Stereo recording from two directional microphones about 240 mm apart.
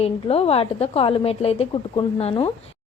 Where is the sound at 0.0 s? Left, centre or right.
Left.